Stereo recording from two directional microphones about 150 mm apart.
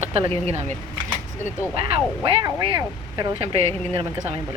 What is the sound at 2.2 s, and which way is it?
Speech, 25° right (ahead or behind).